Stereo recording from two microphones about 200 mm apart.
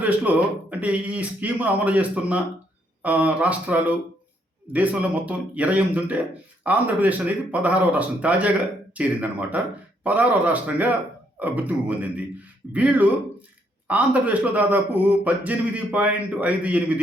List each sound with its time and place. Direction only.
0.0 s speech: 5° right (ahead or behind)